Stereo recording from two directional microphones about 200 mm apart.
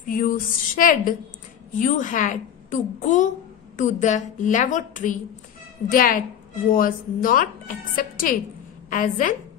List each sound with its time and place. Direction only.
0.0 s a woman's voice: 45° left (ahead or behind)